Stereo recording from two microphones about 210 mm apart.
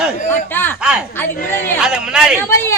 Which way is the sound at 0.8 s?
5° right (ahead or behind).